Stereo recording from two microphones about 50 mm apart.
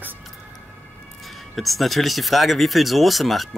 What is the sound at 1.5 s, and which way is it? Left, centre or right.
Speech, centre.